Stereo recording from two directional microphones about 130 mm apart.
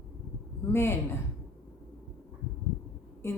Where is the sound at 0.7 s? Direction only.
20° left (ahead or behind).